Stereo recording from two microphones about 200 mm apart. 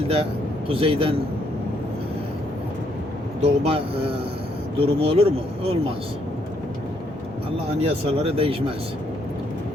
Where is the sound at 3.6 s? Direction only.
30° right (ahead or behind).